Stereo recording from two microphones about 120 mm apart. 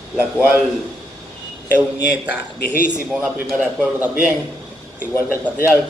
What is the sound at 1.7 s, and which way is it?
A man's voice, 15° right (ahead or behind).